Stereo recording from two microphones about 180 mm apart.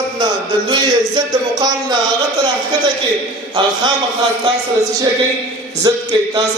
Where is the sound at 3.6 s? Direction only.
25° right (ahead or behind).